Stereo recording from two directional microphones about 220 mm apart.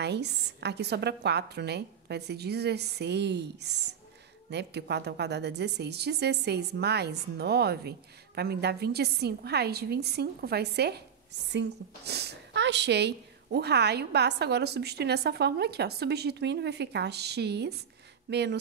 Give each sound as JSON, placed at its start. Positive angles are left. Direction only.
{"t": 0.0, "sound": "a woman's voice", "side_deg": -50}